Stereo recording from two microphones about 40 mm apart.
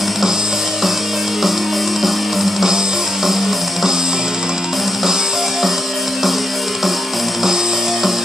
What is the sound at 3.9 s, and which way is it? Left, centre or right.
Music, centre.